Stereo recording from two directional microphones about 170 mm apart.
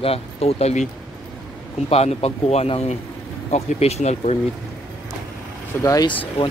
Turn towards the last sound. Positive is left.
turn(degrees=30)  # may be behind; listen again after turning